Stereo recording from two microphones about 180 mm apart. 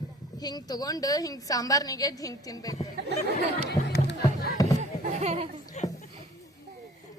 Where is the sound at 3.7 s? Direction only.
60° left (ahead or behind).